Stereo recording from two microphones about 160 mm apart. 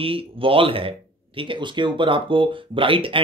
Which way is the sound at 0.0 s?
35° right (ahead or behind).